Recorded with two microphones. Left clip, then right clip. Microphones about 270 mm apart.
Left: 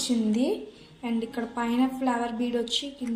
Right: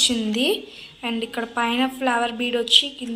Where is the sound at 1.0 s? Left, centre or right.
Centre.